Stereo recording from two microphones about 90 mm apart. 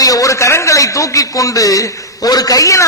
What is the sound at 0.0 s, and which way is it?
A man's voice, 40° left (ahead or behind).